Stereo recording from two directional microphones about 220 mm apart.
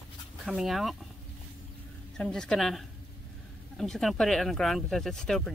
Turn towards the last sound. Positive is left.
turn(degrees=0)  # may be behind; listen again after turning